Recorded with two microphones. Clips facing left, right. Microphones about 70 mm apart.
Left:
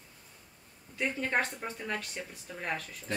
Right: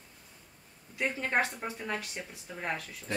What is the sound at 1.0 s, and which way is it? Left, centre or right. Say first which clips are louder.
Speech: right 1 dB; centre.